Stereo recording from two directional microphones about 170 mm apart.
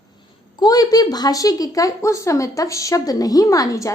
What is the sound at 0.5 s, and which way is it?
A woman's voice, 20° left (ahead or behind).